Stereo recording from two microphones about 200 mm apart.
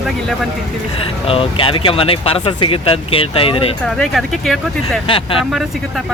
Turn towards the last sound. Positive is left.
turn(degrees=25)  # may be behind; listen again after turning